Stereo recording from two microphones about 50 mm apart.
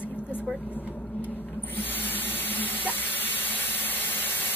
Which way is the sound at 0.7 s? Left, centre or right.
Left.